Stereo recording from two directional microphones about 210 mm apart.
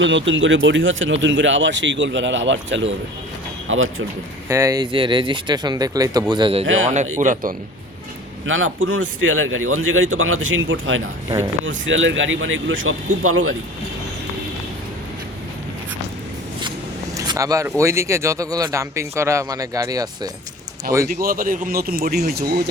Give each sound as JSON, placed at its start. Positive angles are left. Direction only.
{"t": 0.3, "sound": "a man's voice", "side_deg": -65}
{"t": 3.7, "sound": "speech", "side_deg": -70}
{"t": 4.4, "sound": "speech", "side_deg": -15}
{"t": 6.9, "sound": "speech", "side_deg": -35}
{"t": 8.4, "sound": "speech", "side_deg": -70}
{"t": 17.2, "sound": "a man's voice", "side_deg": -15}
{"t": 21.1, "sound": "speech", "side_deg": -45}